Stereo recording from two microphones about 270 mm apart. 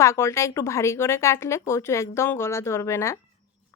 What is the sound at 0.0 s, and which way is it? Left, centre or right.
Speech, centre.